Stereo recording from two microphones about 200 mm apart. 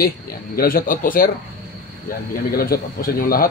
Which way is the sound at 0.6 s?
45° left (ahead or behind).